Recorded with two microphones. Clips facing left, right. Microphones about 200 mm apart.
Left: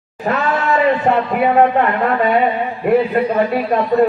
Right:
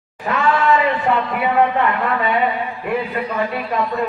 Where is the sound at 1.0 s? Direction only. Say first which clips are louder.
Left 4 dB; 45° left (ahead or behind).